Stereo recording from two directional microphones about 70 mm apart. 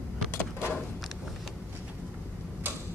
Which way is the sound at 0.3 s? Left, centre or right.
Left.